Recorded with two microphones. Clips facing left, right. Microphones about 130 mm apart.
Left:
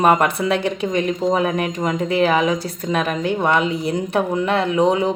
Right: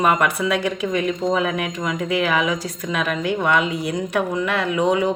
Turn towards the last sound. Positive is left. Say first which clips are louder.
# left 2 dB
turn(degrees=30)  # may be behind; listen again after turning